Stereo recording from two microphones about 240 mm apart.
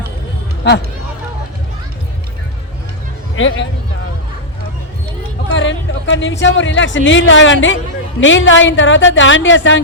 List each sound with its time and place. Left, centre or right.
3.3 s speech: left
5.5 s speech: left